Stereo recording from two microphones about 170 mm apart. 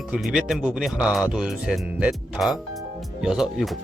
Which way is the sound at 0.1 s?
5° right (ahead or behind).